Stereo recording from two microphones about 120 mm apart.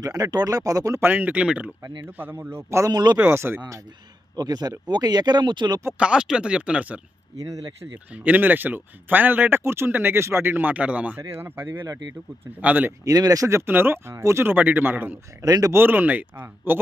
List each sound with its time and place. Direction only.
0.0 s speech: 30° right (ahead or behind)
2.9 s speech: 35° right (ahead or behind)
3.2 s speech: 20° right (ahead or behind); by 5.8 s 40° right (ahead or behind)
5.9 s speech: 10° right (ahead or behind)
7.3 s speech: 30° right (ahead or behind)
8.1 s speech: 15° right (ahead or behind)
12.5 s speech: 15° right (ahead or behind)
13.0 s speech: 30° right (ahead or behind)
15.4 s speech: 30° right (ahead or behind)
15.8 s speech: 15° right (ahead or behind)